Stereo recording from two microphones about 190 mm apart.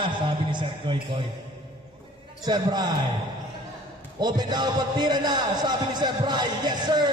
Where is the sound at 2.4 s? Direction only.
20° right (ahead or behind).